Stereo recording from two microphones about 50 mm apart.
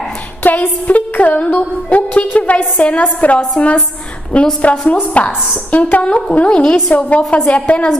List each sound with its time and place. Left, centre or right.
0.4 s music: left
5.1 s a woman's voice: left
6.3 s music: left